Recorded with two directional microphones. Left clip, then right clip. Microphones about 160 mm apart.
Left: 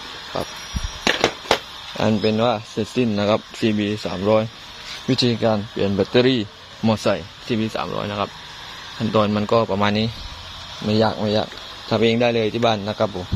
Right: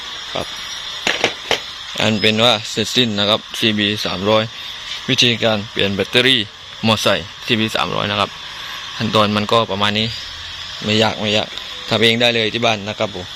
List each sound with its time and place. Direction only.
1.0 s fireworks: 70° left (ahead or behind)
2.0 s speech: 5° left (ahead or behind)
3.2 s speech: 15° left (ahead or behind)
3.6 s speech: 5° left (ahead or behind)
6.8 s speech: 5° left (ahead or behind)